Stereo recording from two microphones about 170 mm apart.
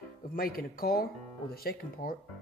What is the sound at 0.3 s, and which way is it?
Speech, 60° left (ahead or behind).